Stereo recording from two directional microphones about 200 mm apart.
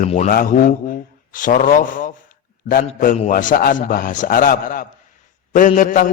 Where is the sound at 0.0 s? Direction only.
35° left (ahead or behind).